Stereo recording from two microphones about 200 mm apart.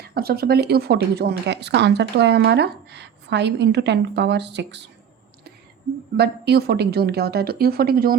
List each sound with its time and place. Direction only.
0.0 s speech: 50° right (ahead or behind)
6.1 s a woman's voice: 55° right (ahead or behind)